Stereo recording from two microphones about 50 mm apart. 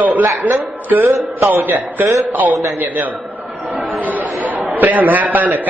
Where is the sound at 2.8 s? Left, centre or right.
Right.